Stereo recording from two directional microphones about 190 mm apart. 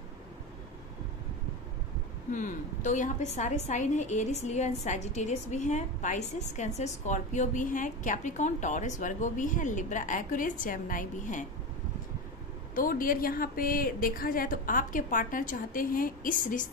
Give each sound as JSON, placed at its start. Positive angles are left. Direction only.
{"t": 2.3, "sound": "a woman's voice", "side_deg": 40}
{"t": 12.7, "sound": "a woman's voice", "side_deg": 45}